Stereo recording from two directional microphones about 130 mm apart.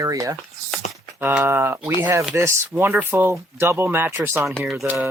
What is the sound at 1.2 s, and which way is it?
Speech, 15° right (ahead or behind).